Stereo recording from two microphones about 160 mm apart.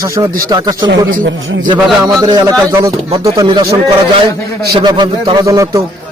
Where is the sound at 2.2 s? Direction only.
25° right (ahead or behind).